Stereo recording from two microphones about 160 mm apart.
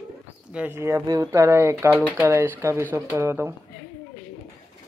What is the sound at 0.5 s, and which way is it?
Speech, 10° right (ahead or behind).